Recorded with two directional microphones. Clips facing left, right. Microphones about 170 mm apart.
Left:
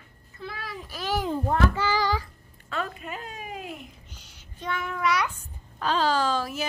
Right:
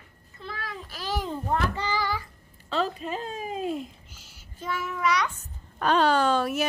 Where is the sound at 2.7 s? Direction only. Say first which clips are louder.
Right 5 dB; 30° right (ahead or behind).